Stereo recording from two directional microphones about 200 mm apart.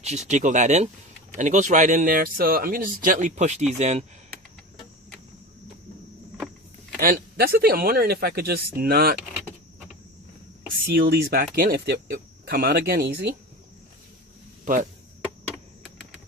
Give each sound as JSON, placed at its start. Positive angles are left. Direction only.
{"t": 0.0, "sound": "speech", "side_deg": -35}
{"t": 7.0, "sound": "speech", "side_deg": -45}
{"t": 10.9, "sound": "speech", "side_deg": -50}
{"t": 14.6, "sound": "chop", "side_deg": -40}